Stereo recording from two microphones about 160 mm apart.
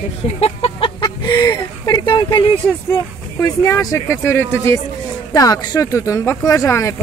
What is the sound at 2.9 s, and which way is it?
Speech, 20° left (ahead or behind).